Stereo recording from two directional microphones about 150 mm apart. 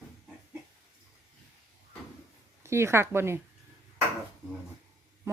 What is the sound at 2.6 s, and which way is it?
Speech, 15° right (ahead or behind).